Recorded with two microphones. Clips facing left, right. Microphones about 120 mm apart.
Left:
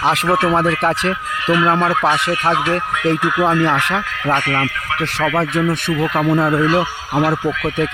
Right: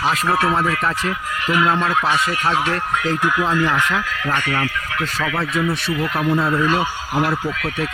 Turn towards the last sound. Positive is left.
turn(degrees=20)  # may be behind; listen again after turning